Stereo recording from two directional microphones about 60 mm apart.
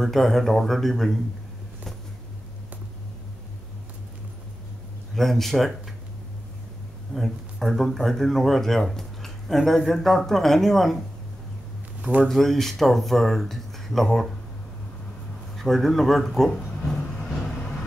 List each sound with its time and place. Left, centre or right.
0.0 s speech: centre
5.1 s speech: centre
7.2 s speech: centre
12.0 s speech: centre
12.3 s speech: centre
15.5 s a sound: centre